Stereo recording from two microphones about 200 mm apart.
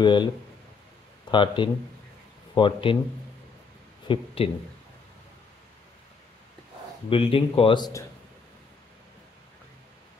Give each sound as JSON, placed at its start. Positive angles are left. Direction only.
{"t": 0.0, "sound": "speech", "side_deg": 25}
{"t": 1.3, "sound": "speech", "side_deg": 25}
{"t": 4.1, "sound": "speech", "side_deg": 25}
{"t": 7.1, "sound": "speech", "side_deg": 25}